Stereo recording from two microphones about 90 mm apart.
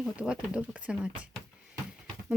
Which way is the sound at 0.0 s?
10° right (ahead or behind).